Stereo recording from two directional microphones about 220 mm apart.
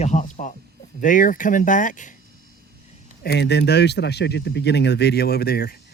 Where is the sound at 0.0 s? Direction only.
35° left (ahead or behind).